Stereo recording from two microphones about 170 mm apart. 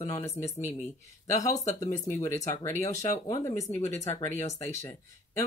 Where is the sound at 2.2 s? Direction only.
20° left (ahead or behind).